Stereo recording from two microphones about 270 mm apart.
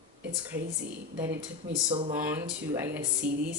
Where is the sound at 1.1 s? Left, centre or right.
Centre.